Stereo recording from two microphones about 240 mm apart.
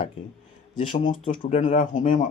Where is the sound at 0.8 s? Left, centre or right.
Left.